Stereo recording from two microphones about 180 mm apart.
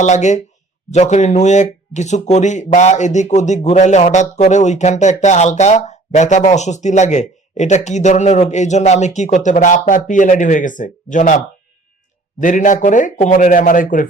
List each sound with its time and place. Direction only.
0.0 s a man's voice: 40° left (ahead or behind)